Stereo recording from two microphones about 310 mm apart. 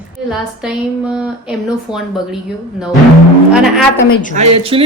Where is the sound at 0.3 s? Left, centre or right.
Centre.